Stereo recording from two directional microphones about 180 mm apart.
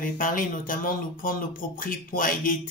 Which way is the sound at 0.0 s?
50° left (ahead or behind).